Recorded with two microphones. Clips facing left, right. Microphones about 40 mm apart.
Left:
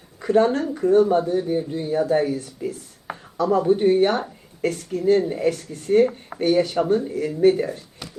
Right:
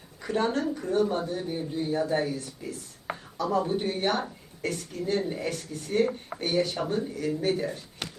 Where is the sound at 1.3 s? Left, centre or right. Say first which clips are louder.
Left 9 dB; left.